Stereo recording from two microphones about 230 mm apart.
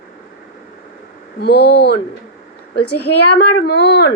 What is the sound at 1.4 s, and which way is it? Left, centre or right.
Speech, left.